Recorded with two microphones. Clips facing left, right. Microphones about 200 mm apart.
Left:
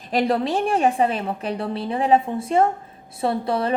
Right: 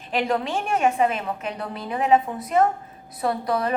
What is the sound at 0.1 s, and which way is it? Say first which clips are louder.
A woman's voice: left 3 dB; 35° left (ahead or behind).